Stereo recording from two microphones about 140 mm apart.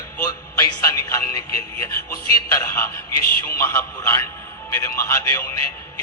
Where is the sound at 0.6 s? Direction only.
25° left (ahead or behind).